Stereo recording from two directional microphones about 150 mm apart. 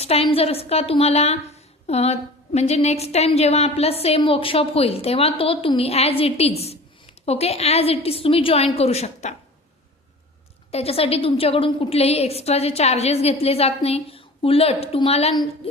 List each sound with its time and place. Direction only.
0.0 s a woman's voice: 40° left (ahead or behind)
10.7 s a woman's voice: 40° left (ahead or behind)